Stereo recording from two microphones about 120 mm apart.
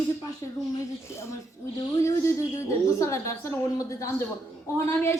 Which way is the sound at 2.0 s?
25° left (ahead or behind).